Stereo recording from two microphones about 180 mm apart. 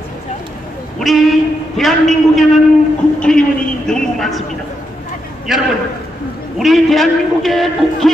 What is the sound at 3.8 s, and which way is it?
Speech, centre (ahead or behind).